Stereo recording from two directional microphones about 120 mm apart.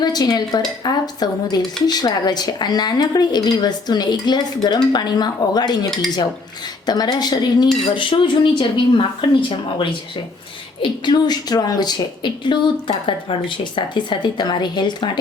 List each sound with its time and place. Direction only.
0.0 s a woman's voice: 35° left (ahead or behind)